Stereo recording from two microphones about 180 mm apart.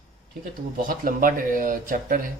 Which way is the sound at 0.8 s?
50° right (ahead or behind).